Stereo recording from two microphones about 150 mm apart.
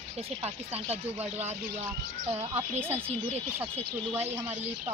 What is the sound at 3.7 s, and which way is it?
Speech, 45° right (ahead or behind).